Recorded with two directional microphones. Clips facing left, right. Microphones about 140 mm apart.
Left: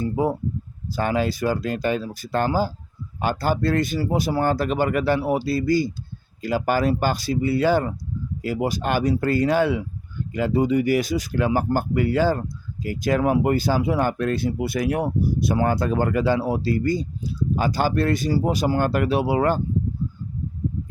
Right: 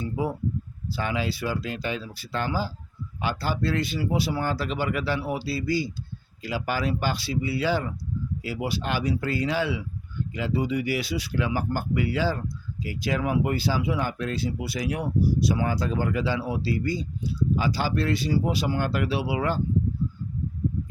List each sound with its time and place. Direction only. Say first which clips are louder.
0.0 s speech: left 5 dB; 45° left (ahead or behind)